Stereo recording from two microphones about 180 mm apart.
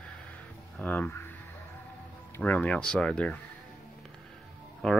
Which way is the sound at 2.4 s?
5° left (ahead or behind).